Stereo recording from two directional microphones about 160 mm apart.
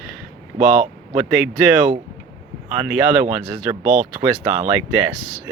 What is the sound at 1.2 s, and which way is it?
Speech, 5° right (ahead or behind).